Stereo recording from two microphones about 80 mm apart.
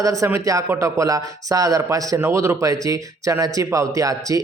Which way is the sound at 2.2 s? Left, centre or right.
Right.